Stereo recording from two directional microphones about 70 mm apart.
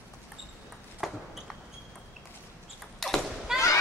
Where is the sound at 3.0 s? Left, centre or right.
Centre.